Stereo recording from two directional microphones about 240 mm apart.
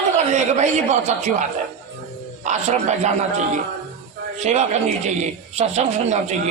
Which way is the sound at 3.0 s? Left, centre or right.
Right.